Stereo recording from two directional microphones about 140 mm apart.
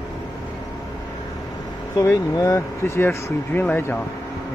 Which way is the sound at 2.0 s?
20° left (ahead or behind).